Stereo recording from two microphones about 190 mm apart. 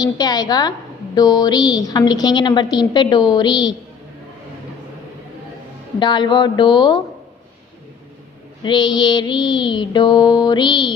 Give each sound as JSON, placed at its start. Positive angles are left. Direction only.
{"t": 0.0, "sound": "a woman's voice", "side_deg": 20}
{"t": 6.0, "sound": "a woman's voice", "side_deg": 25}
{"t": 8.6, "sound": "a woman's voice", "side_deg": 20}